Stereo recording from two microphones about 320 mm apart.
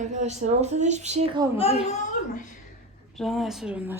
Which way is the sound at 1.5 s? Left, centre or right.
Centre.